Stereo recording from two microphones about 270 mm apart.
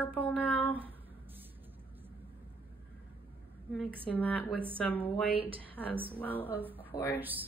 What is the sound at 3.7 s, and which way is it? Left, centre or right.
A woman's voice, centre.